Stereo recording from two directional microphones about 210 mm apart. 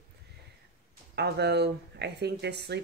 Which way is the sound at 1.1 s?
50° right (ahead or behind).